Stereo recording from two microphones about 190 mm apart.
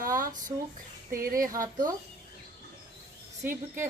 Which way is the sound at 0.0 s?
45° right (ahead or behind).